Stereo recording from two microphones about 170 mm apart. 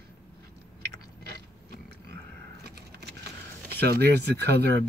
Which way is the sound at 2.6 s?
75° right (ahead or behind).